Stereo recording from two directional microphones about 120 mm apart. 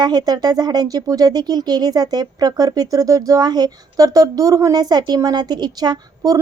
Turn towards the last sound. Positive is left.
turn(degrees=-35)  # may be behind; listen again after turning